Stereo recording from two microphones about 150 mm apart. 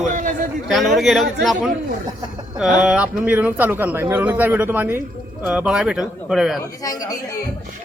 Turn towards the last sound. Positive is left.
turn(degrees=-5)  # may be behind; listen again after turning